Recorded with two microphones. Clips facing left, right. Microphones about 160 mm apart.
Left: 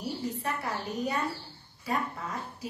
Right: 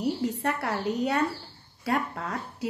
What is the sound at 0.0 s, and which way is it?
A woman's voice, 75° right (ahead or behind).